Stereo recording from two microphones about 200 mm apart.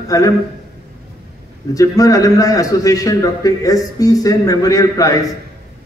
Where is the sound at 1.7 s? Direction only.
15° left (ahead or behind).